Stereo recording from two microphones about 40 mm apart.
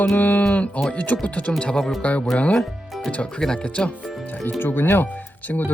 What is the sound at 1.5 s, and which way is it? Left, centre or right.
Speech, left.